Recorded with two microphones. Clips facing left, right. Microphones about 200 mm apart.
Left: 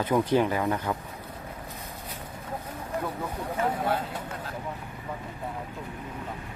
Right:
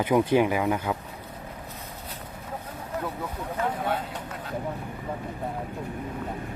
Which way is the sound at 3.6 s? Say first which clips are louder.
Left 1 dB; 10° left (ahead or behind).